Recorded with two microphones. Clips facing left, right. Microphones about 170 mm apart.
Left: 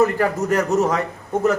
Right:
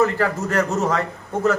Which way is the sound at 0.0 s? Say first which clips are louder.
Left 2 dB; 15° left (ahead or behind).